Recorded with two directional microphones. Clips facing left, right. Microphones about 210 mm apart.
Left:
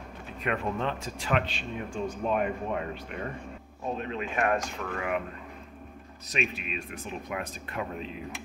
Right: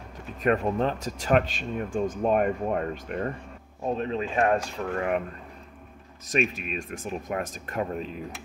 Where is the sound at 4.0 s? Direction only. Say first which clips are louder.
Right 5 dB; 30° right (ahead or behind).